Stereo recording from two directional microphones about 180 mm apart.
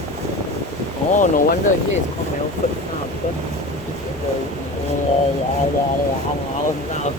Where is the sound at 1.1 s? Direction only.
45° left (ahead or behind).